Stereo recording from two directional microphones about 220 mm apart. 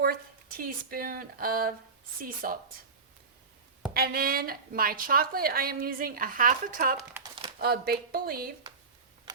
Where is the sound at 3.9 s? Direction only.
45° right (ahead or behind).